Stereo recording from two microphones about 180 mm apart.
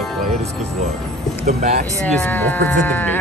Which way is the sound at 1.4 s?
35° right (ahead or behind).